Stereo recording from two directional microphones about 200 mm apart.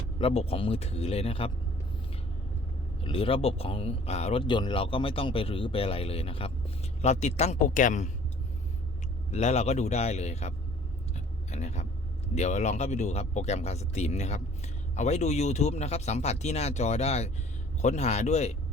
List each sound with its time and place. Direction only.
0.2 s speech: 30° left (ahead or behind)
3.0 s speech: 30° left (ahead or behind)
9.3 s speech: 35° left (ahead or behind)
11.1 s a sound: 35° left (ahead or behind)
12.3 s speech: 35° left (ahead or behind)